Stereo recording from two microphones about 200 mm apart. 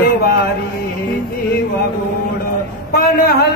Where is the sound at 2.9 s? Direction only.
50° left (ahead or behind).